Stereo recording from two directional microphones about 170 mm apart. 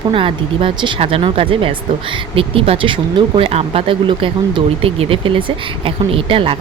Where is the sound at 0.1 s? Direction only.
30° right (ahead or behind).